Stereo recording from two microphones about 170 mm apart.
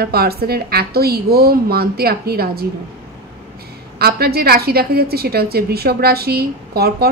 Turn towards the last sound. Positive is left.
turn(degrees=-65)  # may be behind; listen again after turning